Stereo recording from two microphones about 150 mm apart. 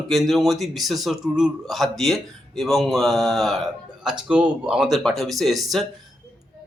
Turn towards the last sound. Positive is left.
turn(degrees=0)  # may be behind; listen again after turning